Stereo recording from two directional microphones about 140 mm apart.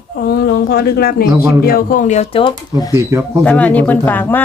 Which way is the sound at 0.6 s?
90° left.